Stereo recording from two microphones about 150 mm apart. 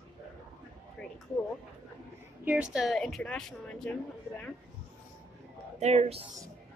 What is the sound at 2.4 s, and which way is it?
A woman's voice, 5° right (ahead or behind).